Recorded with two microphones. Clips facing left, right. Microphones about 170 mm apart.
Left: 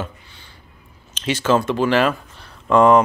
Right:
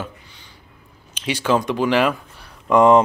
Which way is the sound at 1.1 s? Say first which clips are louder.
Left 2 dB; 10° right (ahead or behind).